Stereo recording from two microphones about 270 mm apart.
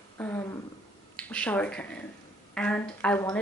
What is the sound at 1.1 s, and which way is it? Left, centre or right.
A woman's voice, centre.